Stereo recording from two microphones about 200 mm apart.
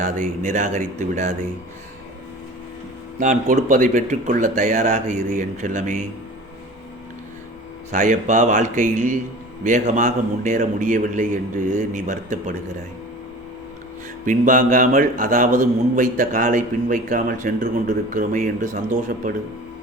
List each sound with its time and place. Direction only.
0.0 s a man's voice: 40° right (ahead or behind)
3.2 s a man's voice: 40° right (ahead or behind)
7.9 s a man's voice: 40° right (ahead or behind)
14.3 s a man's voice: 40° right (ahead or behind)